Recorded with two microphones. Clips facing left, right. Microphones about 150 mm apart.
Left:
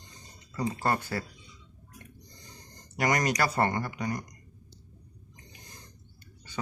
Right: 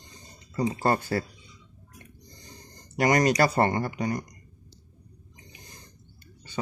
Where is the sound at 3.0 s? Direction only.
25° right (ahead or behind).